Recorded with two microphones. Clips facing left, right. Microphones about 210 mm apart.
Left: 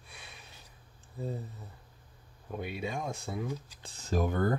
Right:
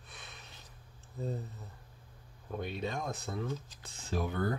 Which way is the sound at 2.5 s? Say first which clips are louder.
Left 1 dB; 10° left (ahead or behind).